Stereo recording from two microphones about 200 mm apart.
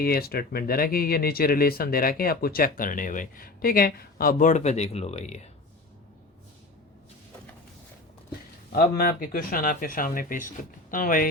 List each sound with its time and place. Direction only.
0.0 s speech: 50° left (ahead or behind); by 5.4 s 35° left (ahead or behind)
8.7 s speech: 45° left (ahead or behind)